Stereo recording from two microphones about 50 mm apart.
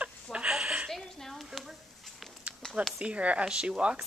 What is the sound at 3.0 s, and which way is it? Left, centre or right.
Speech, right.